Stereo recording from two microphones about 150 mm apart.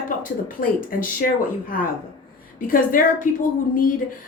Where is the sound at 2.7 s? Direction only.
65° left (ahead or behind).